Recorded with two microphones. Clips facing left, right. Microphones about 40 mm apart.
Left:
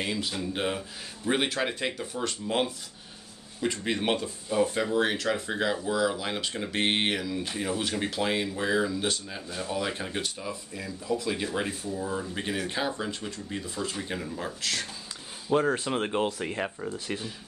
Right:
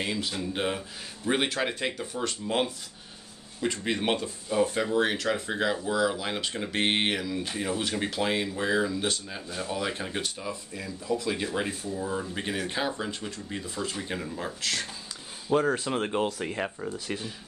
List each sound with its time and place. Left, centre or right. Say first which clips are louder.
0.0 s speech: even; centre